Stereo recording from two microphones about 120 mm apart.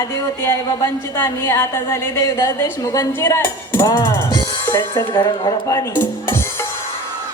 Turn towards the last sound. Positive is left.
turn(degrees=20)  # may be behind; listen again after turning